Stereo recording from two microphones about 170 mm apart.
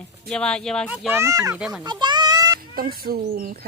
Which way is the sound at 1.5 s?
5° right (ahead or behind).